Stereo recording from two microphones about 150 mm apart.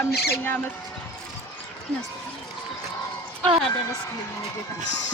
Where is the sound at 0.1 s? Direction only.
90° left.